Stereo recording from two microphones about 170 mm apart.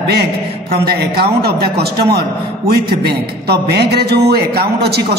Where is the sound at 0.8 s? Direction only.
65° right (ahead or behind).